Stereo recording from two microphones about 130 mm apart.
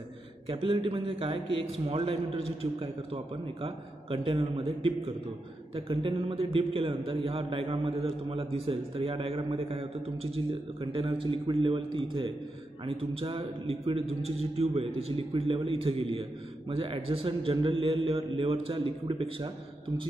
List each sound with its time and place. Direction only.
0.5 s a man's voice: 40° right (ahead or behind)